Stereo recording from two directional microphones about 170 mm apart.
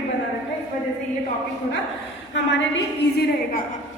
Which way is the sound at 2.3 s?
90° left.